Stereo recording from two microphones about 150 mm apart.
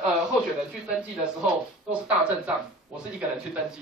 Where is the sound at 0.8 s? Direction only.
5° right (ahead or behind).